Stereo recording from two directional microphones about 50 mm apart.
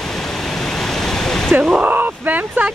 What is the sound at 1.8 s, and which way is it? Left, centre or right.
Speech, right.